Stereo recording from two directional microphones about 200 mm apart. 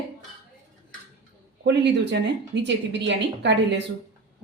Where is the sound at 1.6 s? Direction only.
60° right (ahead or behind).